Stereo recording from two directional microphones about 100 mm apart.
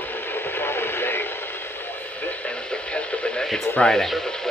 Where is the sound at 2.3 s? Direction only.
10° left (ahead or behind).